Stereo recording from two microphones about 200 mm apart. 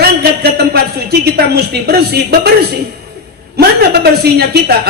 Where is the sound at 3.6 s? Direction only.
50° right (ahead or behind).